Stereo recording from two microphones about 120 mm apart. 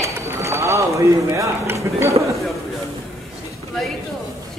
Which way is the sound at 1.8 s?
25° right (ahead or behind).